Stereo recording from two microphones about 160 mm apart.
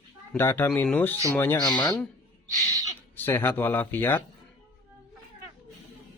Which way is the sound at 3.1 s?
15° left (ahead or behind).